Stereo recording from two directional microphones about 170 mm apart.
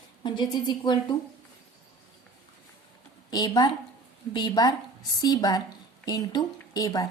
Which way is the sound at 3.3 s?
25° left (ahead or behind).